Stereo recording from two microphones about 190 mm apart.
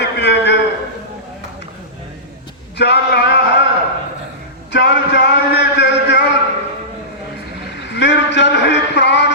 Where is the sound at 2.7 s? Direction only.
60° left (ahead or behind).